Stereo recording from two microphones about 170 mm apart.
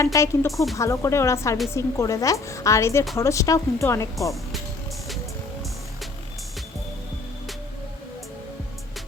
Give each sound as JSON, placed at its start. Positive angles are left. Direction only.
{"t": 0.0, "sound": "a woman's voice", "side_deg": 15}
{"t": 0.5, "sound": "speech", "side_deg": 0}
{"t": 0.8, "sound": "a woman's voice", "side_deg": 15}